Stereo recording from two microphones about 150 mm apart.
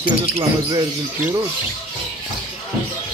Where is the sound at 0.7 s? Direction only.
20° right (ahead or behind).